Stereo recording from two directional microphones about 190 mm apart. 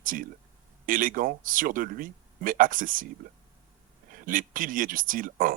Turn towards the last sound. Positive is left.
turn(degrees=-45)  # may be behind; listen again after turning